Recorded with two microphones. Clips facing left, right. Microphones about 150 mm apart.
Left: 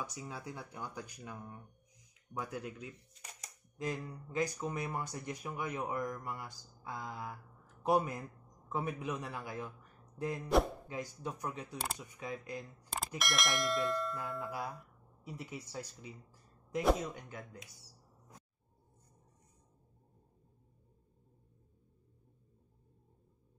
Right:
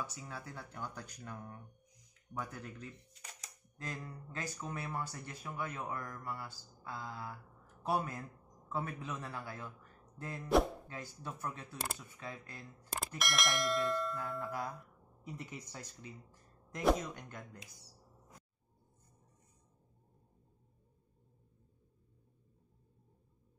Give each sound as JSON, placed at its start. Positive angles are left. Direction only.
{"t": 0.0, "sound": "speech", "side_deg": 15}
{"t": 13.2, "sound": "bell", "side_deg": 0}